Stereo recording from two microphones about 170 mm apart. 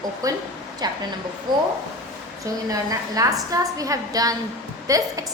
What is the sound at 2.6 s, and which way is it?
A woman's voice, 20° right (ahead or behind).